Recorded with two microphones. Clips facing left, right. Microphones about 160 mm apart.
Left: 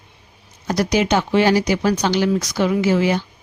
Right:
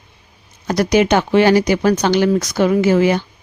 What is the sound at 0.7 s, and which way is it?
A woman's voice, 60° right (ahead or behind).